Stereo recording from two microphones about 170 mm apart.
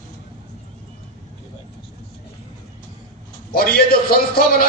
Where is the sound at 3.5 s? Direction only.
65° left (ahead or behind).